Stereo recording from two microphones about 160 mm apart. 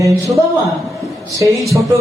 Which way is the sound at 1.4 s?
20° right (ahead or behind).